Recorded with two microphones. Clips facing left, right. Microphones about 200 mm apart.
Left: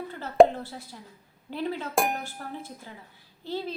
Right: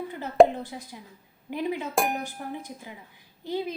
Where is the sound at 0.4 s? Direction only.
15° right (ahead or behind).